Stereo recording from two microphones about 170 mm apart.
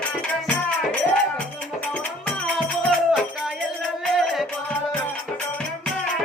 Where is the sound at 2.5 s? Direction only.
Centre (ahead or behind).